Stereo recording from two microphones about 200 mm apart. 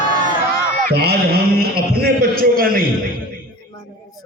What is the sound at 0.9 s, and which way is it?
A man's voice, 50° right (ahead or behind).